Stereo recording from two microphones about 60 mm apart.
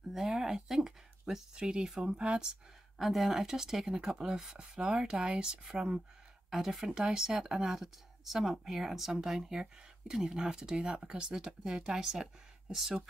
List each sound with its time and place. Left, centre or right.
0.1 s speech: centre
3.0 s speech: centre